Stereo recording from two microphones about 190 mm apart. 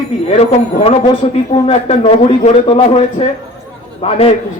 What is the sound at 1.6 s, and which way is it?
A man's voice, 30° left (ahead or behind).